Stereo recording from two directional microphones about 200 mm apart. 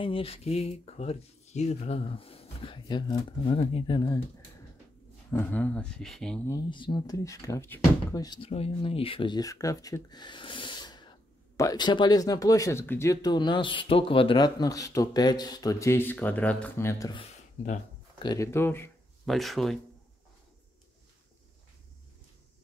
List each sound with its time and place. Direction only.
0.0 s speech: 25° left (ahead or behind)
5.3 s speech: 10° left (ahead or behind)
6.5 s speech: 25° left (ahead or behind)
18.2 s speech: 15° left (ahead or behind)
19.2 s speech: centre (ahead or behind)